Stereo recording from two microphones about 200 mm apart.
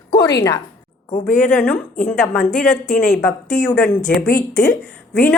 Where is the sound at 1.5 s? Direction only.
5° left (ahead or behind).